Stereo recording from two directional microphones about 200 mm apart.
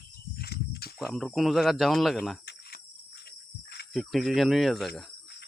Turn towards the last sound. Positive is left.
turn(degrees=0)  # may be behind; listen again after turning